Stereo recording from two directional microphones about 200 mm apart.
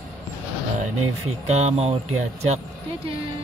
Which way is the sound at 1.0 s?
35° right (ahead or behind).